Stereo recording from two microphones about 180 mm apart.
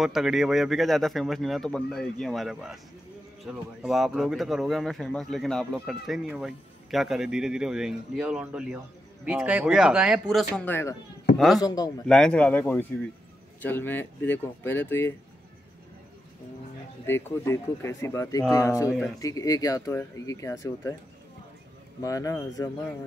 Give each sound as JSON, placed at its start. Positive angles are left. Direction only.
{"t": 0.0, "sound": "speech", "side_deg": 0}
{"t": 11.3, "sound": "speech", "side_deg": 0}
{"t": 11.6, "sound": "speech", "side_deg": 20}
{"t": 12.1, "sound": "speech", "side_deg": 5}
{"t": 17.0, "sound": "speech", "side_deg": 15}
{"t": 22.0, "sound": "speech", "side_deg": 20}